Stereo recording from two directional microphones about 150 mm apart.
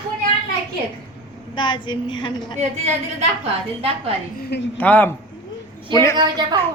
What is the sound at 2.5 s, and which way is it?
Speech, 45° right (ahead or behind).